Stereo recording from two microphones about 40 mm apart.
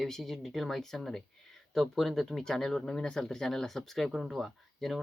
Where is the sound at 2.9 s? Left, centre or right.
Left.